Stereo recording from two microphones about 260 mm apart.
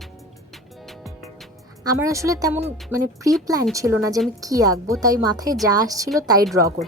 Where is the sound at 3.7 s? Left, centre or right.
Centre.